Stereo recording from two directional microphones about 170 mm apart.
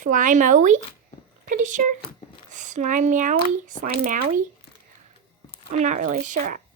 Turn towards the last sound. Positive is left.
turn(degrees=-50)  # may be behind; listen again after turning